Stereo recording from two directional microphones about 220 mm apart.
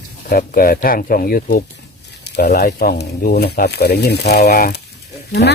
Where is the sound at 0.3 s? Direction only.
40° left (ahead or behind).